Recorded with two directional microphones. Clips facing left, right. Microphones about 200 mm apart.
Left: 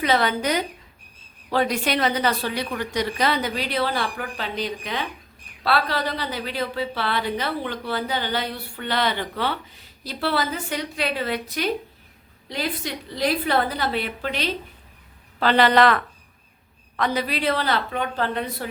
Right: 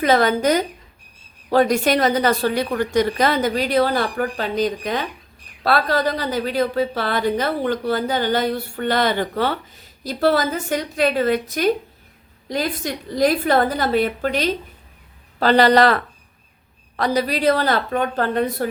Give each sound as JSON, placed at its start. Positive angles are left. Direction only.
{"t": 0.0, "sound": "a woman's voice", "side_deg": -45}